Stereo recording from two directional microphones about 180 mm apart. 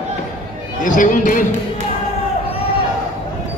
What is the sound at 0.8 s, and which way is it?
Speech, 45° left (ahead or behind).